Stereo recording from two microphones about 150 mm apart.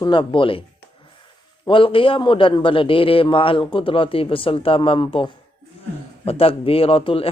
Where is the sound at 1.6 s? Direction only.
35° left (ahead or behind).